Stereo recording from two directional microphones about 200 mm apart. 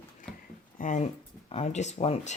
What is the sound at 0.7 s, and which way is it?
Speech, 40° left (ahead or behind).